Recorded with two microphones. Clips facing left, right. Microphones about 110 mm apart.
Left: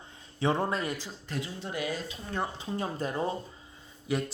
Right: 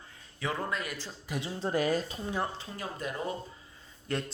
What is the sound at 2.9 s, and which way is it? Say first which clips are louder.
Speech: left 2 dB; 30° left (ahead or behind).